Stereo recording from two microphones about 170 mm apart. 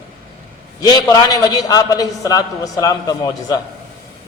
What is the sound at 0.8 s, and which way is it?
A man's voice, 20° left (ahead or behind).